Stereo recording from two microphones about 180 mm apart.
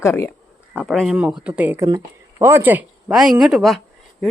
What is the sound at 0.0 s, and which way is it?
Speech, 15° left (ahead or behind).